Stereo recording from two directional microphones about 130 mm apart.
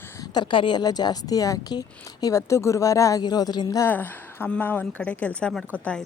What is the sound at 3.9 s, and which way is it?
A woman's voice, 15° left (ahead or behind).